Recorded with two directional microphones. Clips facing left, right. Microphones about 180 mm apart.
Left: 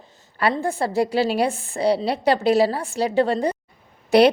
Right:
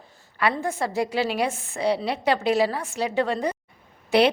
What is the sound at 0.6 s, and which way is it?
A woman's voice, 30° left (ahead or behind).